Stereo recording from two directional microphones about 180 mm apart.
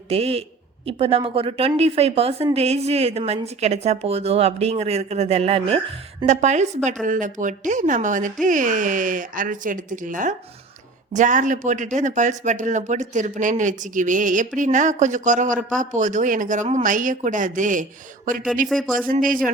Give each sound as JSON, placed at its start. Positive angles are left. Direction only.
{"t": 0.1, "sound": "a woman's voice", "side_deg": -35}
{"t": 18.7, "sound": "speech", "side_deg": 0}
{"t": 18.9, "sound": "speech", "side_deg": -50}